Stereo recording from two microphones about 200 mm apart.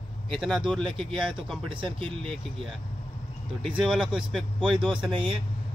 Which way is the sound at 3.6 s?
Centre (ahead or behind).